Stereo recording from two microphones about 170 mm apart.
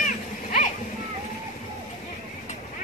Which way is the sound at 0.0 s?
50° left (ahead or behind).